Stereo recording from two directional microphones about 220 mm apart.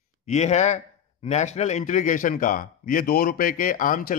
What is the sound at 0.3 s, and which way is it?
A man's voice, 30° left (ahead or behind).